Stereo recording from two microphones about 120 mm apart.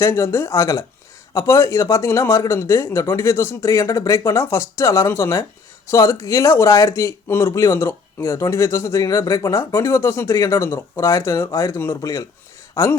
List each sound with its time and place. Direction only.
0.0 s speech: 25° left (ahead or behind)